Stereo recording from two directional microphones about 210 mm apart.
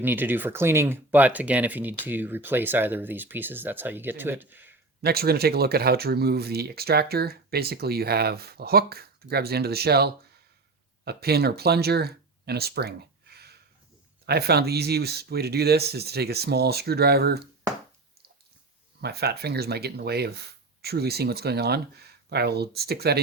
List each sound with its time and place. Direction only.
0.0 s speech: 10° right (ahead or behind)
5.0 s speech: 50° right (ahead or behind)
19.0 s speech: 50° right (ahead or behind)